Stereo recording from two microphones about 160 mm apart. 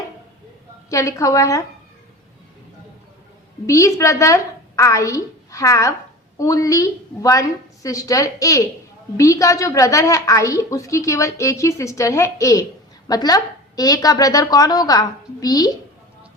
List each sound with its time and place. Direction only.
0.9 s a woman's voice: 20° left (ahead or behind)
3.7 s a woman's voice: 20° left (ahead or behind)